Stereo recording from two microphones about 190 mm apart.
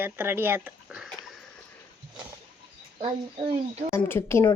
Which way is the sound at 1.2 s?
Centre (ahead or behind).